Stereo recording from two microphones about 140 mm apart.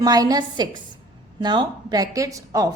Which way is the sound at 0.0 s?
25° right (ahead or behind).